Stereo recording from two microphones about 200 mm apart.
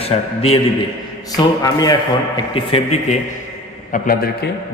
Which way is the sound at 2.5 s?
30° left (ahead or behind).